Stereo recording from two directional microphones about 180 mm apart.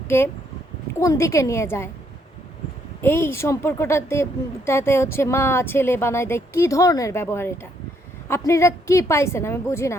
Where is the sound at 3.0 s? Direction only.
15° left (ahead or behind).